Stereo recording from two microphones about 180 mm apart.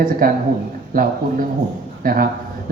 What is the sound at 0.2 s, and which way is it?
Speech, 55° right (ahead or behind).